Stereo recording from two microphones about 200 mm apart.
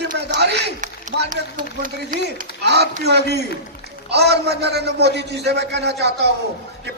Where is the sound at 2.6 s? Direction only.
55° right (ahead or behind).